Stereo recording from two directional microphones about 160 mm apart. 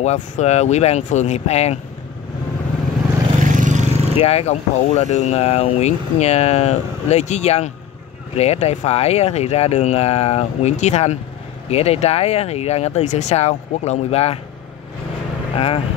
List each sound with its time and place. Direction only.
0.0 s speech: 45° left (ahead or behind)
3.4 s vehicle: 55° right (ahead or behind)
4.2 s speech: 40° left (ahead or behind)
15.5 s speech: 35° left (ahead or behind)